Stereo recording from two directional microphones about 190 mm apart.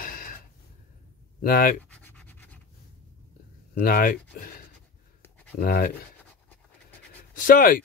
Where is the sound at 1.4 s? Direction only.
50° left (ahead or behind).